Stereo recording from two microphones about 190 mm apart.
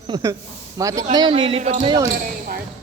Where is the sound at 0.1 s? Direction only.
15° right (ahead or behind).